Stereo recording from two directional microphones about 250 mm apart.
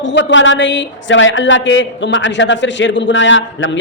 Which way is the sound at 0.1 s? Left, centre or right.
Left.